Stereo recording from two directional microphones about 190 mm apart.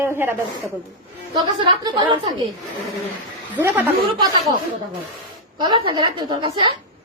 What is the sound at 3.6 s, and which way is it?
Speech, 10° right (ahead or behind).